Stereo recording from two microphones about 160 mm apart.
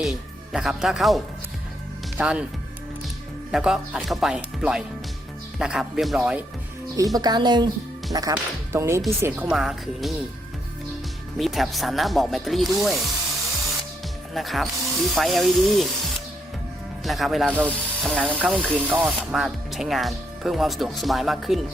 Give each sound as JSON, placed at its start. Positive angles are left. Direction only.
{"t": 0.0, "sound": "speech", "side_deg": -5}
{"t": 3.5, "sound": "speech", "side_deg": -5}
{"t": 6.9, "sound": "speech", "side_deg": -20}
{"t": 11.3, "sound": "speech", "side_deg": 0}
{"t": 14.3, "sound": "speech", "side_deg": 0}
{"t": 17.0, "sound": "speech", "side_deg": 0}
{"t": 18.3, "sound": "speech", "side_deg": -5}